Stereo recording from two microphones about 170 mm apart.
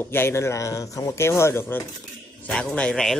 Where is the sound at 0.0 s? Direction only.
15° left (ahead or behind).